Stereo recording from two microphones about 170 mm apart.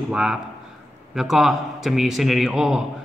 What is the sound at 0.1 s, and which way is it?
A man's voice, 5° right (ahead or behind).